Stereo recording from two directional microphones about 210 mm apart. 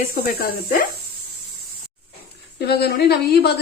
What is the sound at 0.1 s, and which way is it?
Speech, 45° left (ahead or behind).